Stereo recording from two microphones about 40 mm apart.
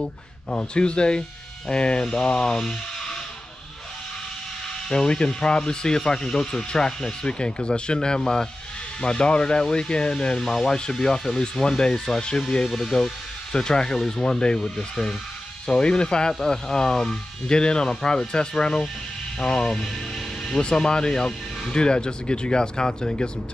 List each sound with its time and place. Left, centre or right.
0.0 s speech: centre
4.8 s speech: centre